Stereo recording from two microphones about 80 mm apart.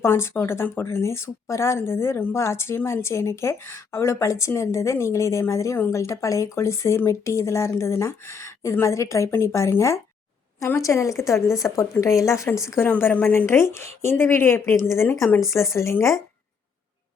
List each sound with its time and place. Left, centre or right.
0.0 s speech: left
12.5 s a woman's voice: centre
12.8 s a woman's voice: left